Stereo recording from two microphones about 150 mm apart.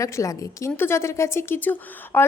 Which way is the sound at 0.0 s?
20° left (ahead or behind).